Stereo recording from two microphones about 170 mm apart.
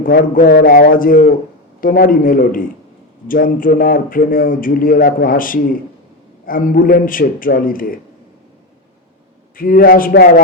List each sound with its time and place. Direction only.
0.0 s speech: 55° left (ahead or behind)
9.6 s speech: 55° left (ahead or behind)